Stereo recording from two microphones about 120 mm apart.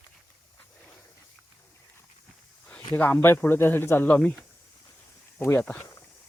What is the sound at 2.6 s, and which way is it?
Speech, 15° left (ahead or behind).